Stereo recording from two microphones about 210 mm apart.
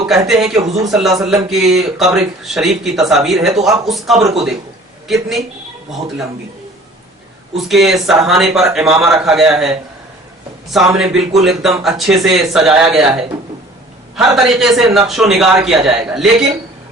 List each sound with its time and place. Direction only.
0.0 s a man's voice: centre (ahead or behind)
7.5 s a man's voice: centre (ahead or behind)
10.9 s a man's voice: centre (ahead or behind)